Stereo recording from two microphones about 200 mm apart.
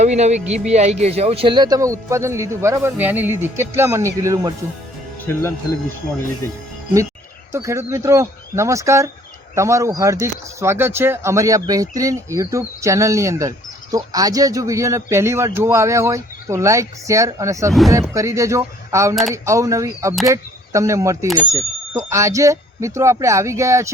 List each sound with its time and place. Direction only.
0.0 s speech: 35° right (ahead or behind); by 4.5 s 15° right (ahead or behind)
5.2 s speech: 10° left (ahead or behind)
7.5 s speech: 15° right (ahead or behind)